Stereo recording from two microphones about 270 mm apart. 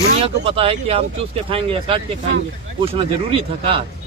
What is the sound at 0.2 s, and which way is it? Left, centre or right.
A man's voice, right.